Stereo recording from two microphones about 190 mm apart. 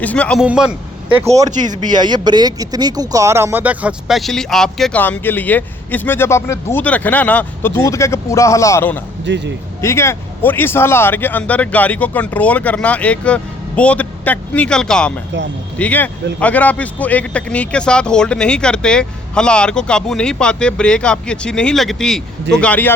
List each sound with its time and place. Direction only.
0.0 s speech: 5° left (ahead or behind)
0.4 s speech: 5° right (ahead or behind)
1.6 s speech: 20° right (ahead or behind); by 9.0 s 10° left (ahead or behind)
9.2 s speech: 65° right (ahead or behind)
9.8 s speech: 15° left (ahead or behind)